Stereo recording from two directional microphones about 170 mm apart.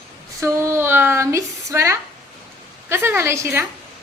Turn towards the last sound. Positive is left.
turn(degrees=-15)  # may be behind; listen again after turning